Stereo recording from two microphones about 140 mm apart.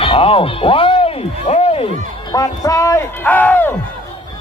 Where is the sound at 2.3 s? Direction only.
25° left (ahead or behind).